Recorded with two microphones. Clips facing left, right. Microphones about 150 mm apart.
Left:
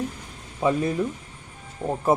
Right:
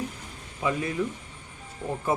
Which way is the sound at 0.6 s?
40° left (ahead or behind).